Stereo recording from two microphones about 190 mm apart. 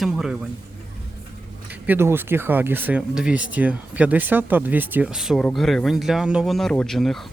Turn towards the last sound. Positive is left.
turn(degrees=0)  # may be behind; listen again after turning